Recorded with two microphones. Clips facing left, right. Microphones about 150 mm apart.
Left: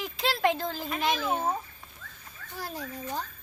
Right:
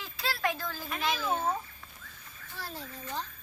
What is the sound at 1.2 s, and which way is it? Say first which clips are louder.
A child's voice: left 2 dB; 15° left (ahead or behind).